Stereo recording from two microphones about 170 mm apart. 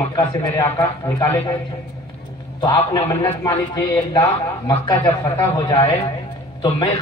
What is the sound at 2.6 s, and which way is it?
A man's voice, 20° left (ahead or behind).